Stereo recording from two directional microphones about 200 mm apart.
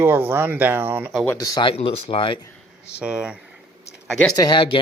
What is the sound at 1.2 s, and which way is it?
Speech, 15° left (ahead or behind).